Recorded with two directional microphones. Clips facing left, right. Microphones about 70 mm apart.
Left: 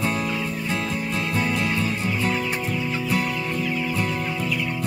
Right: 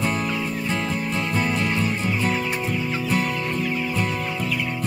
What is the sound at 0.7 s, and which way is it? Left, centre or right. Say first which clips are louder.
Music: even; right.